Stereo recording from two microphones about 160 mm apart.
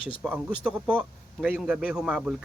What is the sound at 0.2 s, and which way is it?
A man's voice, 5° right (ahead or behind).